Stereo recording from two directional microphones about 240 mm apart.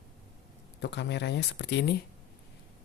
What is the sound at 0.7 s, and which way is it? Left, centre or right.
Speech, left.